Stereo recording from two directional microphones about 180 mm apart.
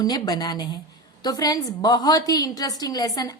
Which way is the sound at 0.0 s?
20° left (ahead or behind).